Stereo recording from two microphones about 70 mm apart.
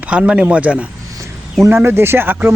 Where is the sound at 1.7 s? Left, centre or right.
Right.